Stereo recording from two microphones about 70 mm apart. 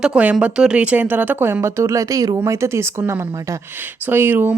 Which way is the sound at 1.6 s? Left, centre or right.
Right.